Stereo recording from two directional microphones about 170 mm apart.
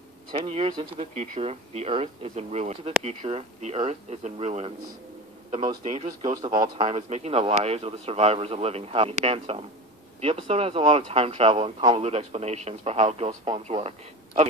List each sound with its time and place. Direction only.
0.4 s speech: 35° right (ahead or behind)
0.9 s speech: 40° right (ahead or behind)
6.2 s speech: 25° right (ahead or behind)
6.9 s a man's voice: 35° right (ahead or behind)